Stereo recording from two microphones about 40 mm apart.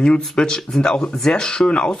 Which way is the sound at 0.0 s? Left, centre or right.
Left.